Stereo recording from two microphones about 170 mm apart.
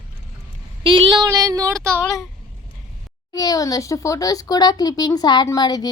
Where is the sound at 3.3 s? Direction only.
20° left (ahead or behind).